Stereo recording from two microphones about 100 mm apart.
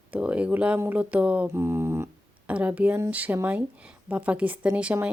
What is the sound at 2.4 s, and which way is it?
Speech, 15° right (ahead or behind).